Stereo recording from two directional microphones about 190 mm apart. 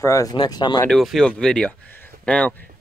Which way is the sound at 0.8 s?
Centre (ahead or behind).